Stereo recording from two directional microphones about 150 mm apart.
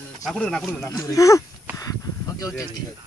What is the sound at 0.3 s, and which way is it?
Speech, 5° left (ahead or behind).